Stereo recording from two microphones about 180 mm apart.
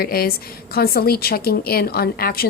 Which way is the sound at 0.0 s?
55° left (ahead or behind).